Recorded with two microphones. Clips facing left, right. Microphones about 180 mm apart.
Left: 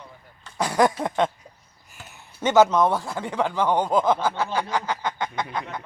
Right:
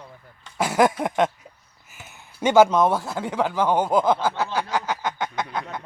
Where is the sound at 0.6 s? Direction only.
5° right (ahead or behind).